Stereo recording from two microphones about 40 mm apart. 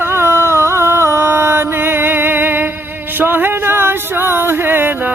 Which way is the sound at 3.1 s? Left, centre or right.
Right.